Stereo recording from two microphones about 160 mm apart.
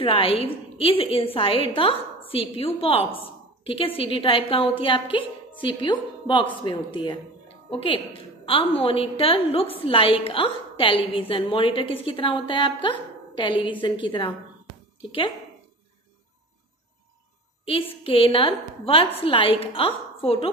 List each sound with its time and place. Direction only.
0.0 s a woman's voice: 35° left (ahead or behind)
17.6 s a woman's voice: 35° left (ahead or behind)